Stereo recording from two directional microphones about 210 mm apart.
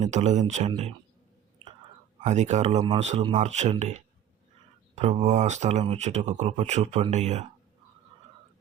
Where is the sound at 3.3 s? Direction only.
35° right (ahead or behind).